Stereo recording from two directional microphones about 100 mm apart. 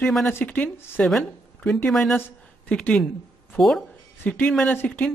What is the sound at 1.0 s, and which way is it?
A man's voice, 5° left (ahead or behind).